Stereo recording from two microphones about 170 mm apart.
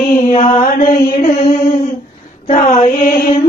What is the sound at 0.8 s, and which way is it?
Mantra, 55° left (ahead or behind).